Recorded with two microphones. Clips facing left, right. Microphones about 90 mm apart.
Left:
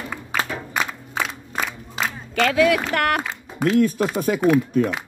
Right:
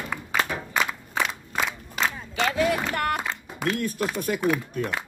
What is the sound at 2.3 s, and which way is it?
Speech, 90° left.